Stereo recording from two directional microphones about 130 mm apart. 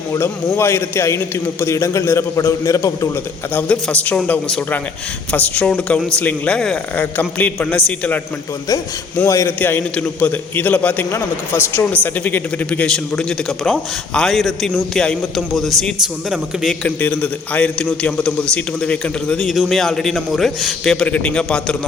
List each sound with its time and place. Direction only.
0.1 s a man's voice: 20° left (ahead or behind)
3.5 s a man's voice: 10° left (ahead or behind)
9.1 s a man's voice: 25° left (ahead or behind); by 16.9 s centre (ahead or behind)
17.0 s a man's voice: 10° left (ahead or behind)